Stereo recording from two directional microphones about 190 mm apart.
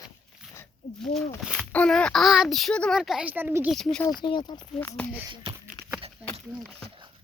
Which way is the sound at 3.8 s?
5° left (ahead or behind).